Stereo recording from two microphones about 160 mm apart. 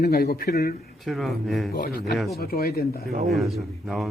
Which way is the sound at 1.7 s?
70° left (ahead or behind).